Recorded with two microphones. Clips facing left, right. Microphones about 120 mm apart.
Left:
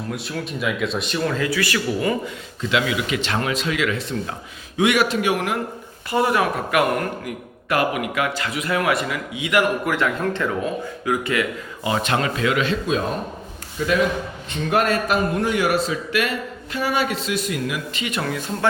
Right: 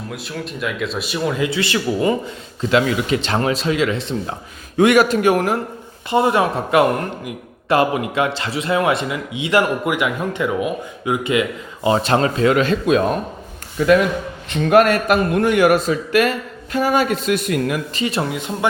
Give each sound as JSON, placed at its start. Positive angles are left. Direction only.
{"t": 0.1, "sound": "speech", "side_deg": 0}
{"t": 2.6, "sound": "speech", "side_deg": -40}
{"t": 4.8, "sound": "a man's voice", "side_deg": -45}
{"t": 6.1, "sound": "speech", "side_deg": -25}
{"t": 9.9, "sound": "speech", "side_deg": -15}
{"t": 13.7, "sound": "a man's voice", "side_deg": -60}
{"t": 17.9, "sound": "speech", "side_deg": -30}
{"t": 18.3, "sound": "speech", "side_deg": -20}